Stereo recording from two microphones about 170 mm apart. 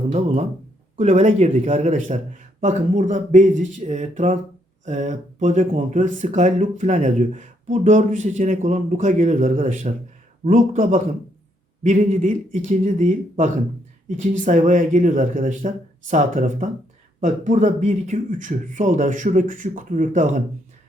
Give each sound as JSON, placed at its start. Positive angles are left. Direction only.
{"t": 0.1, "sound": "speech", "side_deg": -40}